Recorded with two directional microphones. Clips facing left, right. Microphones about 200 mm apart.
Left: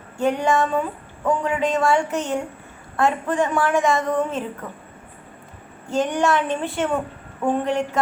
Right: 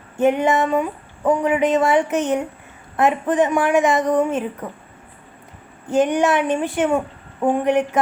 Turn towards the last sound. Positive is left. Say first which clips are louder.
# right 4 dB
turn(degrees=-20)  # may be behind; listen again after turning